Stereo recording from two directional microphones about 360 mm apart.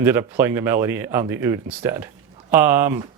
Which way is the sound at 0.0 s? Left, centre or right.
Centre.